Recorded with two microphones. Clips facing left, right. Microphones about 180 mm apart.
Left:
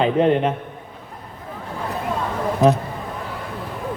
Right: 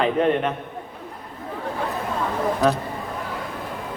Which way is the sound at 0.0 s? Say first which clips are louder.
Left 3 dB; 30° left (ahead or behind).